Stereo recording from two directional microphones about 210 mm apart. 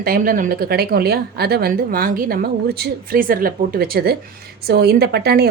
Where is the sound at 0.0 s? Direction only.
45° right (ahead or behind).